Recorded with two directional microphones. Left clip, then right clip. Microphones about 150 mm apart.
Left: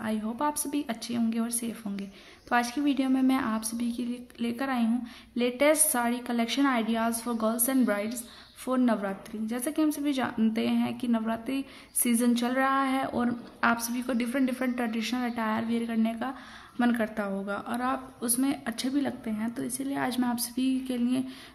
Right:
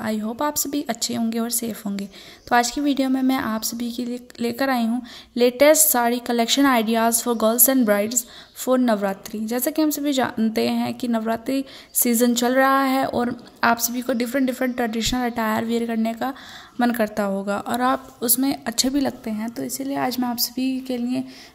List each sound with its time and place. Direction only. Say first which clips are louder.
0.0 s a woman's voice: right 6 dB; 40° right (ahead or behind)
19.4 s a woman's voice: right 5 dB; 25° right (ahead or behind)